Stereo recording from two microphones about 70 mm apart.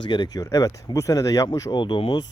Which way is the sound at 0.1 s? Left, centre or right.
Left.